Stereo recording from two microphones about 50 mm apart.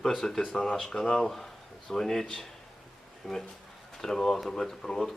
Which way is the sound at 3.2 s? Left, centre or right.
Centre.